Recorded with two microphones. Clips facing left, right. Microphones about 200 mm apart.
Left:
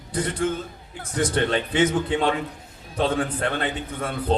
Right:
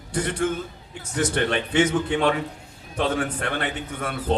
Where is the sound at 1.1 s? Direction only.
25° right (ahead or behind).